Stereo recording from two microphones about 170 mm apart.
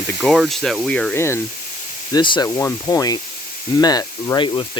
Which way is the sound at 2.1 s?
25° left (ahead or behind).